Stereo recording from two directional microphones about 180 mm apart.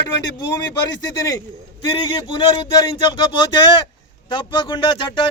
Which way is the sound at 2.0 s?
25° left (ahead or behind).